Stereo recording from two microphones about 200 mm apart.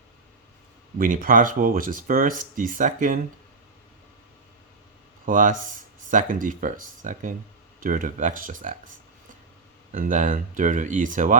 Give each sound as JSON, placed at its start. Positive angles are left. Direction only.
{"t": 0.9, "sound": "speech", "side_deg": -45}
{"t": 5.2, "sound": "speech", "side_deg": -40}
{"t": 9.9, "sound": "speech", "side_deg": -40}